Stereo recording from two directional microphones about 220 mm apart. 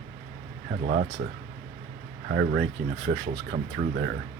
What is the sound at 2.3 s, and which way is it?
Speech, 50° right (ahead or behind).